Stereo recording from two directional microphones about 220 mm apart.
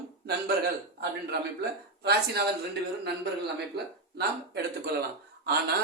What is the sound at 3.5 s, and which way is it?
A man's voice, 50° right (ahead or behind).